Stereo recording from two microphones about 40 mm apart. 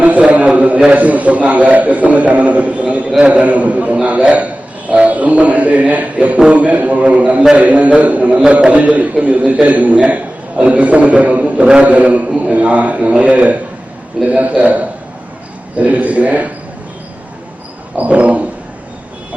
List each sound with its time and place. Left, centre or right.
0.0 s a sound: right
0.9 s a man's voice: right
3.4 s a man's voice: right
17.9 s a man's voice: right